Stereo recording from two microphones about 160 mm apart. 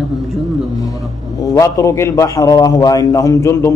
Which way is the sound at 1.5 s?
20° left (ahead or behind).